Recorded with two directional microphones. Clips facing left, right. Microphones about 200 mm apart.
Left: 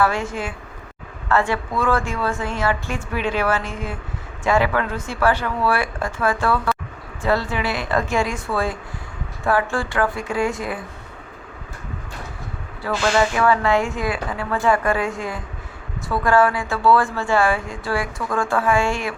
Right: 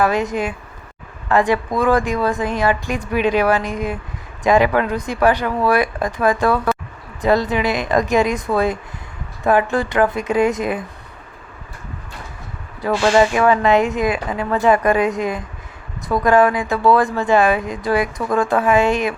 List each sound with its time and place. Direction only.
0.0 s speech: 20° right (ahead or behind)
12.9 s speech: 20° right (ahead or behind)